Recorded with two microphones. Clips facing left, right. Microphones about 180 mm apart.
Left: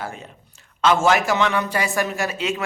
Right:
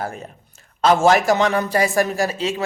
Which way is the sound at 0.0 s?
40° right (ahead or behind).